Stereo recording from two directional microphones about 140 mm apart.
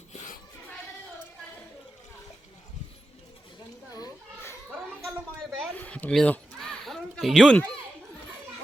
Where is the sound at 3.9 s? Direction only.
25° left (ahead or behind).